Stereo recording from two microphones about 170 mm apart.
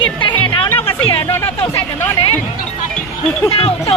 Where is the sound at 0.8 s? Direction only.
35° left (ahead or behind).